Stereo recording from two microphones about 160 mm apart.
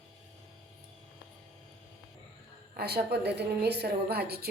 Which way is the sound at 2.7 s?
90° right.